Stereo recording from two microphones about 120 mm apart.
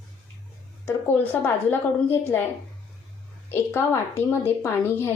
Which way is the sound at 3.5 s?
20° left (ahead or behind).